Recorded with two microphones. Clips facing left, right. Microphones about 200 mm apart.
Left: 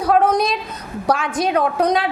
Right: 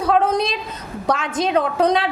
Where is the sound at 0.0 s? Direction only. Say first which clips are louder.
Left 2 dB; 25° right (ahead or behind).